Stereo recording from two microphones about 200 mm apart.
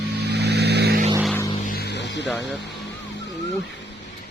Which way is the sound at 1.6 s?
50° left (ahead or behind).